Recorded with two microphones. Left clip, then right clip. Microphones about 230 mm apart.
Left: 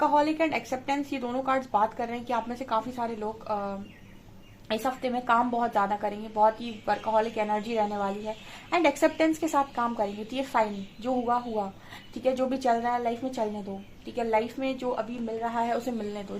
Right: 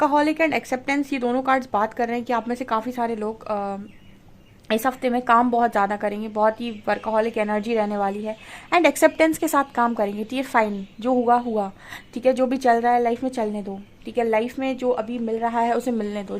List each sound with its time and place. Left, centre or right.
0.0 s a woman's voice: right